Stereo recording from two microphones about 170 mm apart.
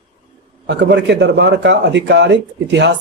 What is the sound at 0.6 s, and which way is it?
Speech, 90° right.